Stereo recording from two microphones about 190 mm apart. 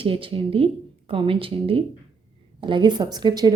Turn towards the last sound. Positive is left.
turn(degrees=-20)  # may be behind; listen again after turning